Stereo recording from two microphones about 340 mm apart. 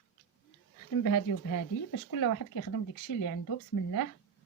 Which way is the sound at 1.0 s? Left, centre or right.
Left.